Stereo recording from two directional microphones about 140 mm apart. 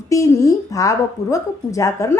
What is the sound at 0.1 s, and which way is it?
A woman's voice, 20° left (ahead or behind).